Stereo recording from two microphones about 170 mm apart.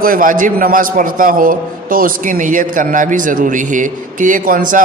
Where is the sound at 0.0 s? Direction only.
55° right (ahead or behind).